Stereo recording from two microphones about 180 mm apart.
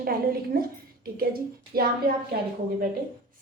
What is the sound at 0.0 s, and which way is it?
Speech, 55° right (ahead or behind).